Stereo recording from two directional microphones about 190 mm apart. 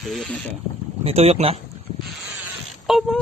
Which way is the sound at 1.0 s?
35° right (ahead or behind).